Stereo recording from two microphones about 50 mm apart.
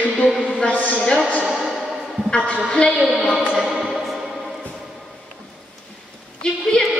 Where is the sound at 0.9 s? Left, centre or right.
Centre.